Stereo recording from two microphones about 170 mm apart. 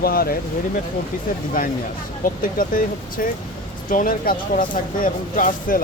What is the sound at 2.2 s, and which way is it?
Speech, 55° left (ahead or behind).